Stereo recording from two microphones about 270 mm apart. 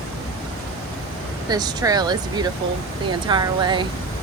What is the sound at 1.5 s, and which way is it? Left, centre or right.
Speech, centre.